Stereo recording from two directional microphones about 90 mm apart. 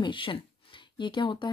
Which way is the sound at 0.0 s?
65° left (ahead or behind).